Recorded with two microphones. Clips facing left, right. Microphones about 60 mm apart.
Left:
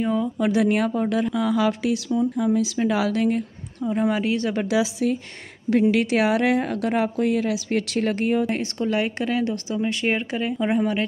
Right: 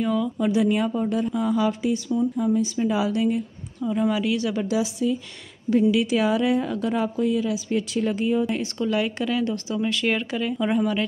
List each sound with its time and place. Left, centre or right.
0.0 s speech: left
0.4 s a woman's voice: left
2.3 s a woman's voice: left
3.9 s speech: left
5.0 s a woman's voice: left
8.7 s speech: left
9.5 s speech: left